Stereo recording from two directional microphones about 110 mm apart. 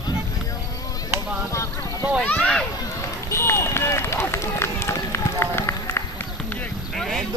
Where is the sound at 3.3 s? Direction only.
25° left (ahead or behind).